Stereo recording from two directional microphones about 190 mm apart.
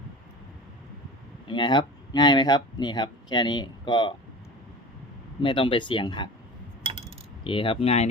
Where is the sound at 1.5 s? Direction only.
25° left (ahead or behind).